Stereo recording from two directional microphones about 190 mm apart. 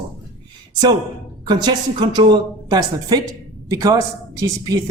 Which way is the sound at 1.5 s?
20° right (ahead or behind).